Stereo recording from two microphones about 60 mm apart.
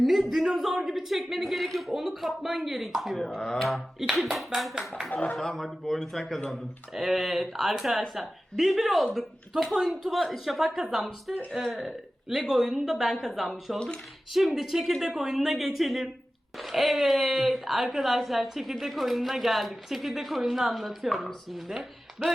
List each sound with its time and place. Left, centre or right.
0.0 s speech: centre
3.4 s a sound: centre
4.0 s speech: centre
5.1 s speech: left
5.4 s a woman's voice: centre
13.7 s a sound: centre
14.3 s speech: centre